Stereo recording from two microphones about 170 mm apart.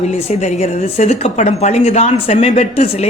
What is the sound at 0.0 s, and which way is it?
Speech, 40° left (ahead or behind).